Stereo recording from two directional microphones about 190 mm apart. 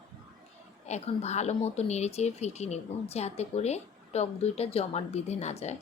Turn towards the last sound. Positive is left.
turn(degrees=35)  # may be behind; listen again after turning